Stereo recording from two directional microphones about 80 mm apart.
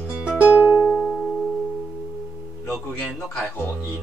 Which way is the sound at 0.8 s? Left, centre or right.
Centre.